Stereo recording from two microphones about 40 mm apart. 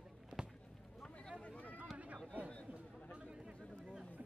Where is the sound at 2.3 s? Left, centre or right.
Right.